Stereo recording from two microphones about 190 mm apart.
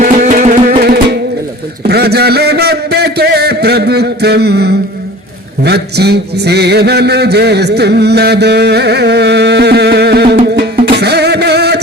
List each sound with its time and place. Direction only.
0.0 s music: 40° right (ahead or behind)
1.9 s a sound: 55° right (ahead or behind)
10.4 s music: 55° right (ahead or behind)